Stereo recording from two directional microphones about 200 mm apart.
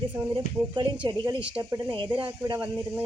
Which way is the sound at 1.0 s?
20° right (ahead or behind).